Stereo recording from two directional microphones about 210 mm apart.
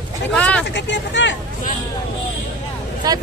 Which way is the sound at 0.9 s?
60° left (ahead or behind).